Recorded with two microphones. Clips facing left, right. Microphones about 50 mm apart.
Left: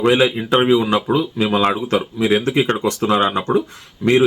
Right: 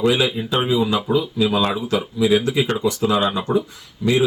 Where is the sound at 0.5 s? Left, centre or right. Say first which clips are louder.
Left 4 dB; left.